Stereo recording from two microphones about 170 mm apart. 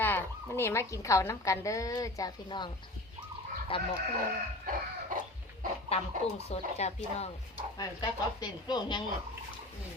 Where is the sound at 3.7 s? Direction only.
30° left (ahead or behind).